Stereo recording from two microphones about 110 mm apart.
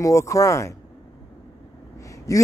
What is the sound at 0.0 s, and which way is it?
Speech, 25° left (ahead or behind).